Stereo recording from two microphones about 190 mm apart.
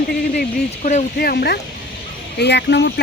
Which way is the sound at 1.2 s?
55° left (ahead or behind).